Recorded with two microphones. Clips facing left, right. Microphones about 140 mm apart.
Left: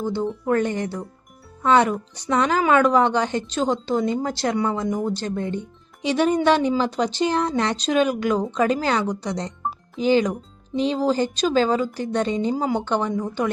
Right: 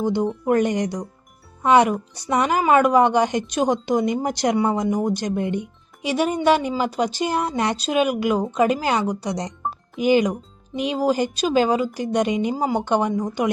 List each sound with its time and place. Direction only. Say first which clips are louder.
0.0 s speech: right 3 dB; 15° right (ahead or behind)